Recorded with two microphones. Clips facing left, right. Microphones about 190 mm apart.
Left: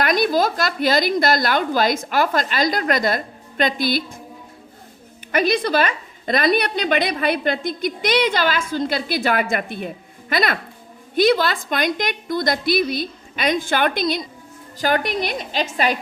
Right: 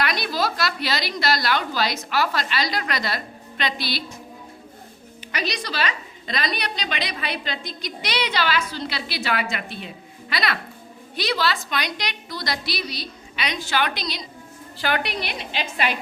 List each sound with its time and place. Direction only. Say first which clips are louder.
0.0 s a woman's voice: left 7 dB; 45° left (ahead or behind)
5.3 s a woman's voice: left 11 dB; 50° left (ahead or behind)